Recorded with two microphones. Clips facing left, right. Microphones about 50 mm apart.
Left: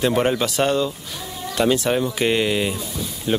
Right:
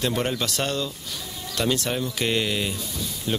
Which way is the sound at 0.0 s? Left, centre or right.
Centre.